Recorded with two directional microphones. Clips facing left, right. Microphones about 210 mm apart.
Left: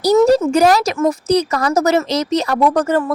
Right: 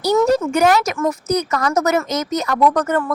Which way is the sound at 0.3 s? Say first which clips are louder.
Left 3 dB; 35° left (ahead or behind).